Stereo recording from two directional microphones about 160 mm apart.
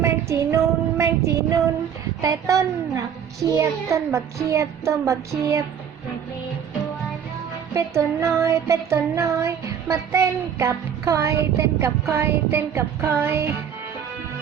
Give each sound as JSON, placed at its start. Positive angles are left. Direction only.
{"t": 0.0, "sound": "child singing", "side_deg": -20}
{"t": 2.2, "sound": "a child's voice", "side_deg": -20}
{"t": 7.7, "sound": "music", "side_deg": -20}